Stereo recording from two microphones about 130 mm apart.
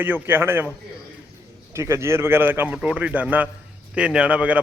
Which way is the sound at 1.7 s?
20° right (ahead or behind).